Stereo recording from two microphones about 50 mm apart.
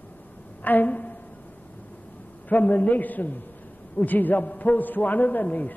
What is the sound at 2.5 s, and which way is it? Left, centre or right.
A man's voice, left.